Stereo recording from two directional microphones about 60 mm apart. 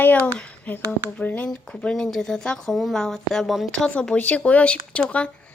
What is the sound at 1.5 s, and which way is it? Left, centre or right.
A woman's voice, centre.